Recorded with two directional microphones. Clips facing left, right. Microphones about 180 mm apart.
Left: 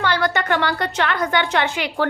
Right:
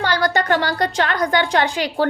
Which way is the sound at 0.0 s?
40° right (ahead or behind).